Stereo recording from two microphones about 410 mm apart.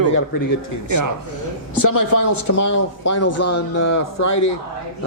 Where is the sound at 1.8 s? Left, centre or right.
Left.